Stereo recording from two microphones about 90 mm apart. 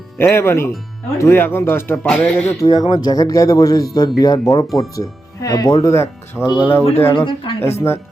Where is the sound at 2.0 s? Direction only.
15° left (ahead or behind).